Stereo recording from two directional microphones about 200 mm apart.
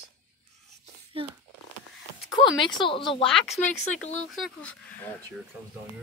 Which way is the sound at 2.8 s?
25° left (ahead or behind).